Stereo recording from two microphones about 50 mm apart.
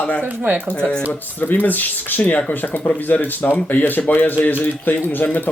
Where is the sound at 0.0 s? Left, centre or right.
Left.